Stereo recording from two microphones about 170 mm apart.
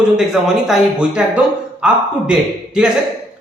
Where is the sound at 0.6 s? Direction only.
5° right (ahead or behind).